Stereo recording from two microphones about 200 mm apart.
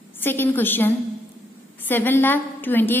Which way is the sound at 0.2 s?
10° left (ahead or behind).